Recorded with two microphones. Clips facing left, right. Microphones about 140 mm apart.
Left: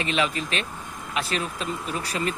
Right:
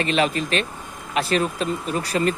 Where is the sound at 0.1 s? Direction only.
45° right (ahead or behind).